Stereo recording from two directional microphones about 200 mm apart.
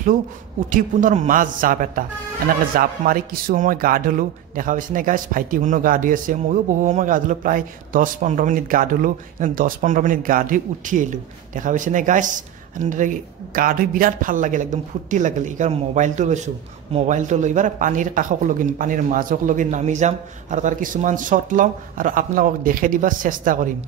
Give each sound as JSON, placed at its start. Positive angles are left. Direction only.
{"t": 0.7, "sound": "a man's voice", "side_deg": -40}